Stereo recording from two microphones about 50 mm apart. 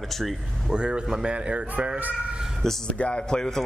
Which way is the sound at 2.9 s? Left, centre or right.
Left.